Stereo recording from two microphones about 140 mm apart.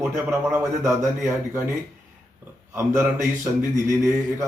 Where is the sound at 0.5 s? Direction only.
20° right (ahead or behind).